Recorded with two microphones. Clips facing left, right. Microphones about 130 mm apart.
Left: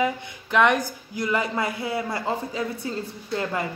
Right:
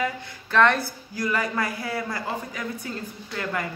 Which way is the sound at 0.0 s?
20° left (ahead or behind).